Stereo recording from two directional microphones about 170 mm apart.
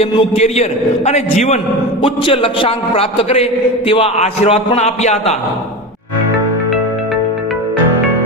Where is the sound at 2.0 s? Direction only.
30° left (ahead or behind).